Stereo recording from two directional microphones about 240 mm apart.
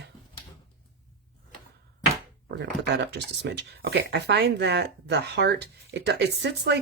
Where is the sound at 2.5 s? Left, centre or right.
Right.